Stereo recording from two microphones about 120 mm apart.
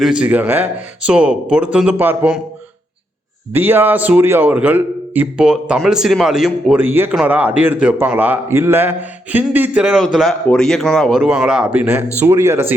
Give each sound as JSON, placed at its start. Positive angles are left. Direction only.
{"t": 0.0, "sound": "a man's voice", "side_deg": -10}
{"t": 3.5, "sound": "a man's voice", "side_deg": -15}
{"t": 6.8, "sound": "a man's voice", "side_deg": -15}
{"t": 11.2, "sound": "a man's voice", "side_deg": -10}